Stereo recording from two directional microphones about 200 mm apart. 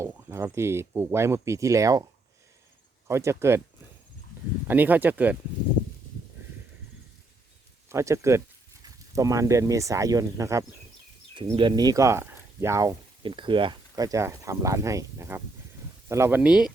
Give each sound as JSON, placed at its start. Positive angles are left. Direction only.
{"t": 0.0, "sound": "speech", "side_deg": -10}
{"t": 3.1, "sound": "speech", "side_deg": -15}
{"t": 4.7, "sound": "speech", "side_deg": -10}
{"t": 7.9, "sound": "speech", "side_deg": -15}